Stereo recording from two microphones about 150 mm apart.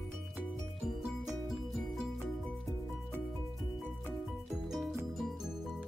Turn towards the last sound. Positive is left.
turn(degrees=0)  # may be behind; listen again after turning